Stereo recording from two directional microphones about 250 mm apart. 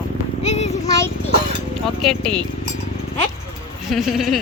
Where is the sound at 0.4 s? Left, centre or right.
Left.